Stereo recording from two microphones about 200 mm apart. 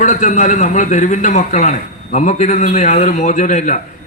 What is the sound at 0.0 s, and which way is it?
A man's voice, 40° left (ahead or behind).